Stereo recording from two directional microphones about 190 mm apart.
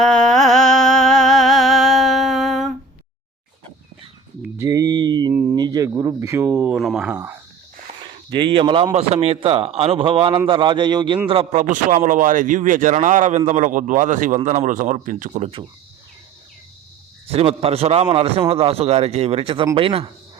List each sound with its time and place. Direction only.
0.0 s music: 5° left (ahead or behind)
4.4 s a sound: 15° right (ahead or behind)
5.3 s speech: 10° right (ahead or behind)
6.7 s speech: centre (ahead or behind)
8.3 s a man's voice: 25° right (ahead or behind)
11.7 s speech: 45° right (ahead or behind)
17.3 s a man's voice: 30° right (ahead or behind)